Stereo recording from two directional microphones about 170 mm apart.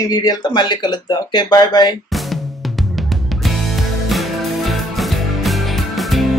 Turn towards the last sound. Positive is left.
turn(degrees=0)  # may be behind; listen again after turning